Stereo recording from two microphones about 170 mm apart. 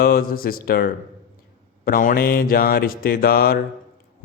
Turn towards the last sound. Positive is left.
turn(degrees=60)  # may be behind; listen again after turning